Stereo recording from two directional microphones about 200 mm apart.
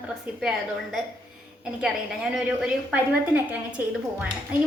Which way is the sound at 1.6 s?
5° right (ahead or behind).